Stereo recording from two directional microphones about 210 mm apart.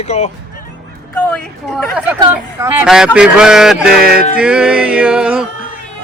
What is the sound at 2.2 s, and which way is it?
Speech, 15° right (ahead or behind).